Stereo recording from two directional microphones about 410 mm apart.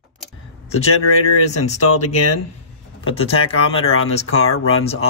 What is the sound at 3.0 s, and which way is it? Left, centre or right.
Speech, left.